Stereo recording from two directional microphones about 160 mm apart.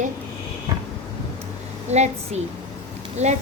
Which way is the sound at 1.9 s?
45° right (ahead or behind).